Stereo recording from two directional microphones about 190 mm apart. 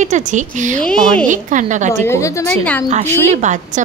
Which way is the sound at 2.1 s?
15° left (ahead or behind).